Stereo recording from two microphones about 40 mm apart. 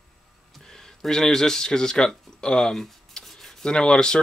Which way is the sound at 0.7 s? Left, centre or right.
Centre.